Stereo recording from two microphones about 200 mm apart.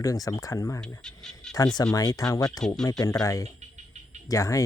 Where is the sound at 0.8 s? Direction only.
5° left (ahead or behind).